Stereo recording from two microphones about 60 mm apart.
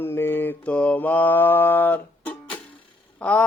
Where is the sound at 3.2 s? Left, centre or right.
Left.